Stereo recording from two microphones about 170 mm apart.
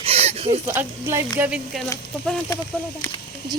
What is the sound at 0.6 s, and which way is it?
Speech, 15° right (ahead or behind).